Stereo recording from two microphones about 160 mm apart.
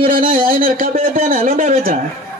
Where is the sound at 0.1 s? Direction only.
60° right (ahead or behind).